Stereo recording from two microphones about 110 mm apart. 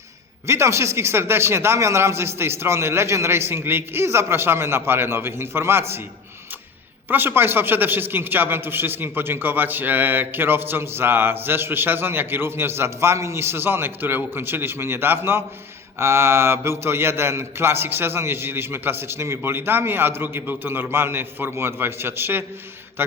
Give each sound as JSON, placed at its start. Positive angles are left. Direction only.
{"t": 0.4, "sound": "a man's voice", "side_deg": -25}
{"t": 7.1, "sound": "a man's voice", "side_deg": -20}